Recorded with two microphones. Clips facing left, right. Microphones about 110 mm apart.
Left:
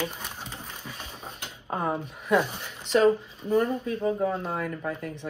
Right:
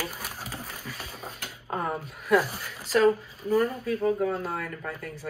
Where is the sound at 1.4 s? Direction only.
25° left (ahead or behind).